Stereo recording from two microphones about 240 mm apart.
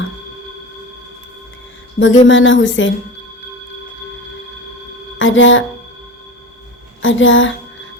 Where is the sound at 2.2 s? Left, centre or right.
Left.